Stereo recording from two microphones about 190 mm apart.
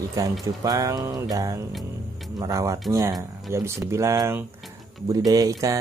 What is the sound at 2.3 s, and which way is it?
Speech, 20° right (ahead or behind).